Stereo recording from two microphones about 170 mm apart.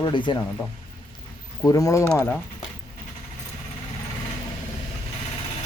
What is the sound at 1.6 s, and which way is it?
Speech, 20° left (ahead or behind).